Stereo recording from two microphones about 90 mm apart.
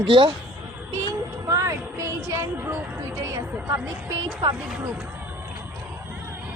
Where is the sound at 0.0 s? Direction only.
70° right (ahead or behind).